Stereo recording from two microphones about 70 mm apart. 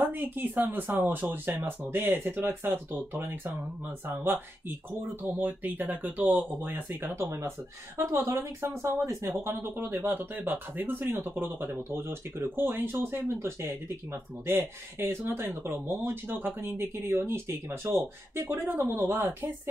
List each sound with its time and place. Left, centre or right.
0.0 s speech: right
7.2 s speech: right